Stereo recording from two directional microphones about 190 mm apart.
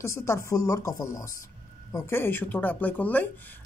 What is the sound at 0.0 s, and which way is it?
Speech, 15° left (ahead or behind).